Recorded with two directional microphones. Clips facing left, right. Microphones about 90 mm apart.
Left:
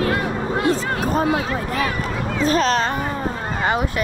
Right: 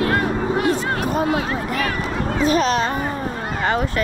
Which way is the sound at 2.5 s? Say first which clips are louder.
Even; 40° left (ahead or behind).